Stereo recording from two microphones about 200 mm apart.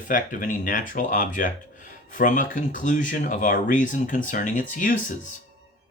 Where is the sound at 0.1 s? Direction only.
40° left (ahead or behind).